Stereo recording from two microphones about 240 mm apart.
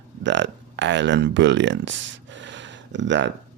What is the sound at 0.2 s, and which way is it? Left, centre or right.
Speech, right.